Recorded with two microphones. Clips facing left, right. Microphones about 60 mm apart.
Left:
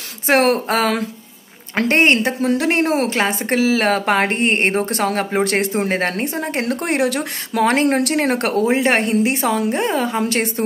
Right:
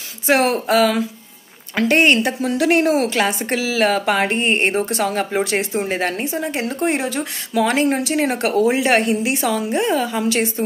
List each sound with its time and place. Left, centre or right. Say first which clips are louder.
0.3 s speech: left 1 dB; left
6.6 s speech: left 3 dB; left
8.6 s speech: even; left